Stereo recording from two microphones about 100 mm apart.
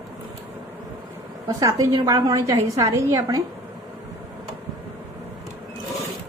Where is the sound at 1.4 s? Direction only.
35° right (ahead or behind).